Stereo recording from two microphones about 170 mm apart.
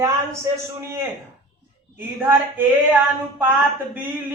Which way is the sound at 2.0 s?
10° right (ahead or behind).